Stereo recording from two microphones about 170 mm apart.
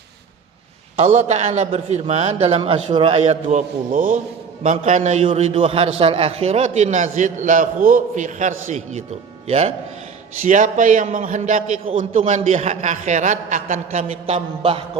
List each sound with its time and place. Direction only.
0.9 s a man's voice: 40° right (ahead or behind)